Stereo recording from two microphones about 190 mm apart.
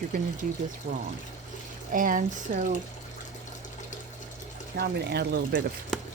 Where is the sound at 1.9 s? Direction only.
45° right (ahead or behind).